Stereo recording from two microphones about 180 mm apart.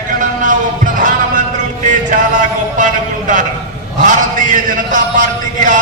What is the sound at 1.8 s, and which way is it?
Music, 45° right (ahead or behind).